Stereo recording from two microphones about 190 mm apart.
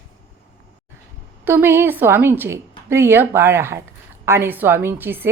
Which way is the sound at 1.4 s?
10° right (ahead or behind).